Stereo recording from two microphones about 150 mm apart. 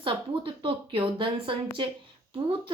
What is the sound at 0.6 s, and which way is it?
Speech, 35° right (ahead or behind).